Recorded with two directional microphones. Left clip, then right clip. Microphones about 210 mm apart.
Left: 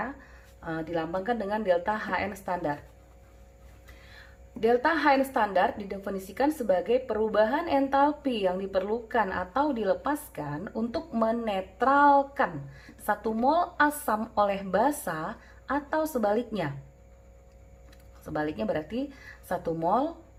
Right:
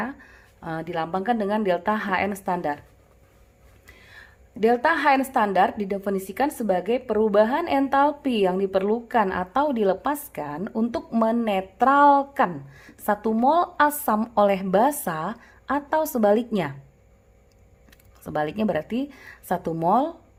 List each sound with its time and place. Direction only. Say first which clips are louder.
0.6 s a woman's voice: right 3 dB; 50° right (ahead or behind)
4.6 s a woman's voice: right 4 dB; 55° right (ahead or behind)
18.3 s a woman's voice: right 5 dB; 55° right (ahead or behind)